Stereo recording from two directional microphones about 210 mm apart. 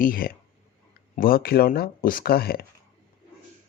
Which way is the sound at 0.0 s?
45° left (ahead or behind).